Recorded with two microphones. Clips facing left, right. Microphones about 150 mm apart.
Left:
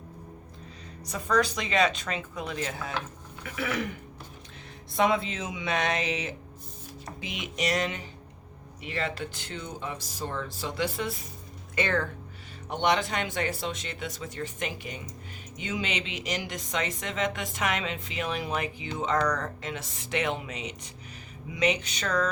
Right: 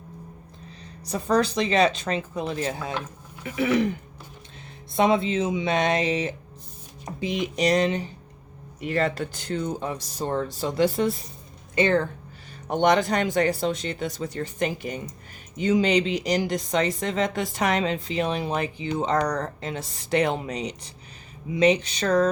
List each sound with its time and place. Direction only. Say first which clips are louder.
1.0 s speech: right 4 dB; 35° right (ahead or behind)
2.7 s speech: right 3 dB; 20° right (ahead or behind)
4.9 s speech: right 5 dB; 25° right (ahead or behind)
8.8 s speech: right 8 dB; 45° right (ahead or behind); by 12.0 s 25° right (ahead or behind)
12.6 s speech: right 6 dB; 45° right (ahead or behind)